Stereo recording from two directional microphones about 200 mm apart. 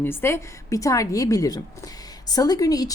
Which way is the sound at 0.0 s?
10° left (ahead or behind).